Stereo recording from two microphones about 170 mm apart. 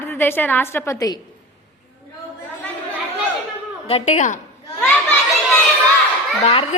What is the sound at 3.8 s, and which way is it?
Speech, 40° left (ahead or behind).